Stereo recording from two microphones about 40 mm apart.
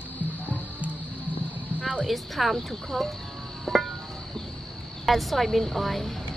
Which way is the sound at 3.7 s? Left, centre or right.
Centre.